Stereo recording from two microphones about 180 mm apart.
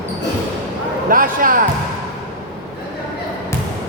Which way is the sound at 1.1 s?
50° right (ahead or behind).